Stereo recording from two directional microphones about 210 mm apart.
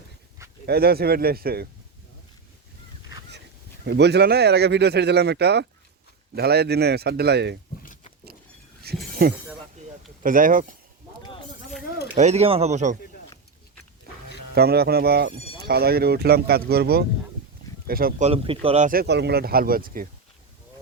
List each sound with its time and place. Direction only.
0.6 s speech: 50° right (ahead or behind)
3.8 s speech: 55° right (ahead or behind)
8.8 s chink: 45° right (ahead or behind)
10.2 s speech: 40° right (ahead or behind)
12.1 s speech: 30° right (ahead or behind)
14.5 s speech: 50° right (ahead or behind)
18.3 s speech: 25° right (ahead or behind)
18.9 s speech: 50° right (ahead or behind)